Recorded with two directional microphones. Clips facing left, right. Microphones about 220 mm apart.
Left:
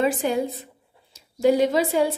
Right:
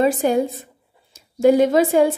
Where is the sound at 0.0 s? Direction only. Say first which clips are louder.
Right 5 dB; 45° right (ahead or behind).